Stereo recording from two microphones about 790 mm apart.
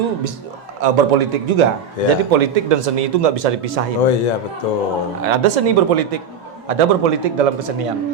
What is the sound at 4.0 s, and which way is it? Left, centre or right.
Speech, left.